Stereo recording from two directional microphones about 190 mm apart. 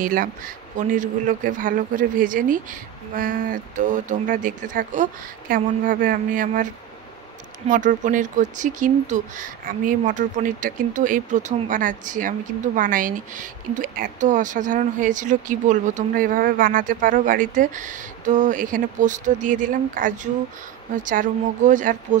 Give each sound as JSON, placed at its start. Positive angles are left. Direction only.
{"t": 0.0, "sound": "speech", "side_deg": -45}
{"t": 7.7, "sound": "speech", "side_deg": -40}